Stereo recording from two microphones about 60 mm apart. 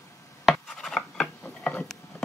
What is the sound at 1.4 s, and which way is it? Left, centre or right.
Tick-tock, left.